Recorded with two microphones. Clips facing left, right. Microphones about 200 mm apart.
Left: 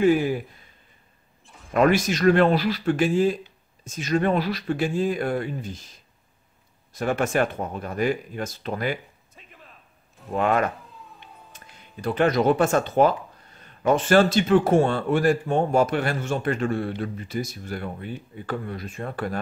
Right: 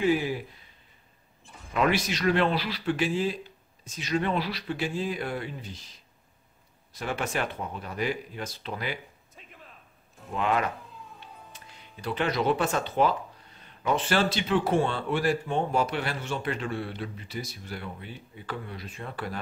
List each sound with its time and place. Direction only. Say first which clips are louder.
0.0 s speech: left 6 dB; 50° left (ahead or behind)
1.7 s speech: left 6 dB; 45° left (ahead or behind)
10.3 s speech: left 5 dB; 50° left (ahead or behind)